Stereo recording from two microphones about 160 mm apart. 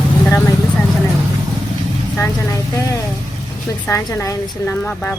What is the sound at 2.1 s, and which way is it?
Vehicle, 15° left (ahead or behind).